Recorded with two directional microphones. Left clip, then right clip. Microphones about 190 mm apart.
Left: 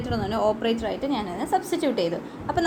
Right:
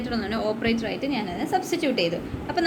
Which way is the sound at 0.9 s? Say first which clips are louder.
Even; 90° left.